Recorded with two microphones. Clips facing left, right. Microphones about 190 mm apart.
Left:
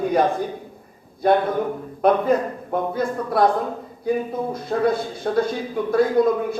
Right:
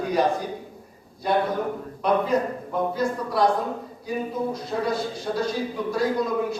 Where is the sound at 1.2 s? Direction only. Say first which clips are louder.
Left 5 dB; 55° left (ahead or behind).